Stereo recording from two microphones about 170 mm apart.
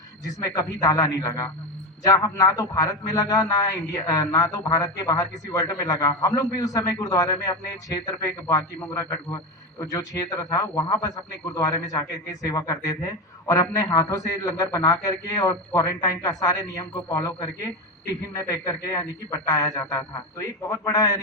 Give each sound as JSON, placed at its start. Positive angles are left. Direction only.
{"t": 0.3, "sound": "a man's voice", "side_deg": 20}
{"t": 9.8, "sound": "a man's voice", "side_deg": 20}